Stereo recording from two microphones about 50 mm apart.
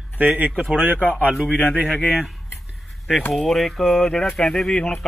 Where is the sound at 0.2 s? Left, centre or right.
Right.